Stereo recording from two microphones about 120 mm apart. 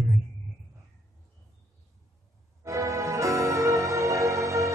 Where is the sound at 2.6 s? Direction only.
25° right (ahead or behind).